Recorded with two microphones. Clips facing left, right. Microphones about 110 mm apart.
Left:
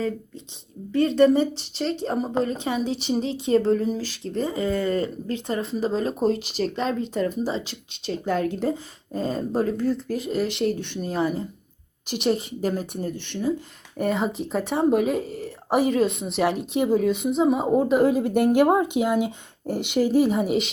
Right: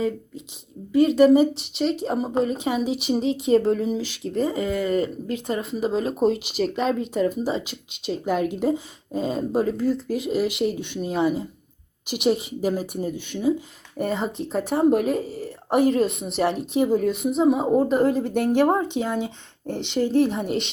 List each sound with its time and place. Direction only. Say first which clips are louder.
0.9 s speech: right 3 dB; 5° right (ahead or behind)
3.2 s a woman's voice: right 4 dB; 30° left (ahead or behind)
3.6 s speech: even; 10° right (ahead or behind)
4.0 s speech: right 2 dB; 35° left (ahead or behind)
4.7 s speech: right 1 dB; 15° right (ahead or behind); by 20.7 s 5° left (ahead or behind)